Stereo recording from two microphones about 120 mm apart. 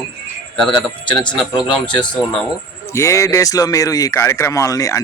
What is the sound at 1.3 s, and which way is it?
Speech, 40° left (ahead or behind).